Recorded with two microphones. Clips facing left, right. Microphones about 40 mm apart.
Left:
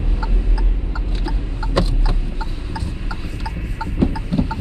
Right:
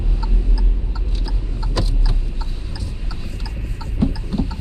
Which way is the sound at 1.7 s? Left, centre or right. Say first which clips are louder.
Left 5 dB; left.